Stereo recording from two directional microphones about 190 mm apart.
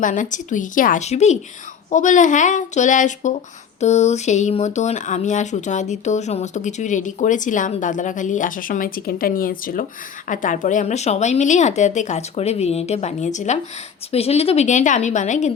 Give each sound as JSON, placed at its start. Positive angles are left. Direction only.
{"t": 0.0, "sound": "speech", "side_deg": 45}